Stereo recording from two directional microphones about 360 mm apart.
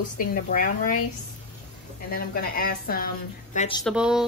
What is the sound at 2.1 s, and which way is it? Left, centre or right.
A woman's voice, left.